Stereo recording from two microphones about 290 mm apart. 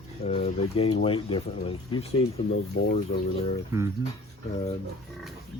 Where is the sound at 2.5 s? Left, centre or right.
Left.